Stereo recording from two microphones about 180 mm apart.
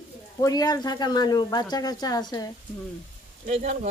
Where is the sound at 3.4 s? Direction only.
45° right (ahead or behind).